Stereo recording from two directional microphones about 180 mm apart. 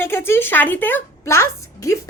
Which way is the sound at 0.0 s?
15° left (ahead or behind).